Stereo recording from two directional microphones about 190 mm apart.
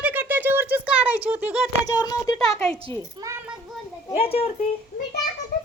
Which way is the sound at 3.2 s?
25° right (ahead or behind).